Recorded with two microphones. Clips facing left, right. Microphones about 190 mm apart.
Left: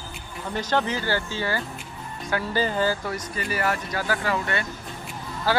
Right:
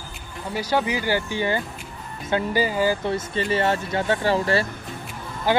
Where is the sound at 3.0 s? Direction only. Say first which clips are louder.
Right 6 dB; 25° right (ahead or behind).